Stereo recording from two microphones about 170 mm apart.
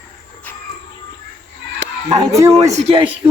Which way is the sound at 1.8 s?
90° right.